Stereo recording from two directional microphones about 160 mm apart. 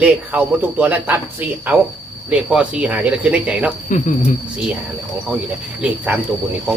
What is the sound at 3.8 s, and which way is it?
Speech, 50° left (ahead or behind).